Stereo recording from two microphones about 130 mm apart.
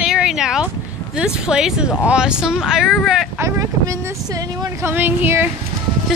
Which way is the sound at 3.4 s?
25° right (ahead or behind).